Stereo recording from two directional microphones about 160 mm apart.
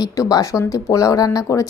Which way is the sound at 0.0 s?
20° left (ahead or behind).